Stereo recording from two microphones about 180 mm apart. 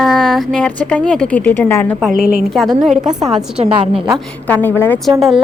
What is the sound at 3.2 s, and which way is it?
Speech, 35° right (ahead or behind).